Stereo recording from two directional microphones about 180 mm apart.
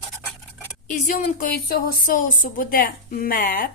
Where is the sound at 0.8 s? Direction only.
50° left (ahead or behind).